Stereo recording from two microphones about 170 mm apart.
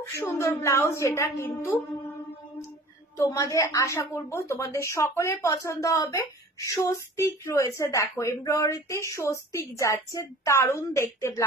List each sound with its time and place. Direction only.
0.1 s a woman's voice: 15° left (ahead or behind)
3.2 s a woman's voice: 20° left (ahead or behind)